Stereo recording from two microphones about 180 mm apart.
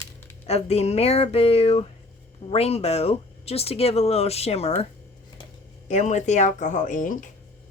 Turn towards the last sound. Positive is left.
turn(degrees=45)  # may be behind; listen again after turning